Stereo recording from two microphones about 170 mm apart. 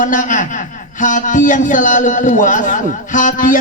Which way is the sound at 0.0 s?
50° left (ahead or behind).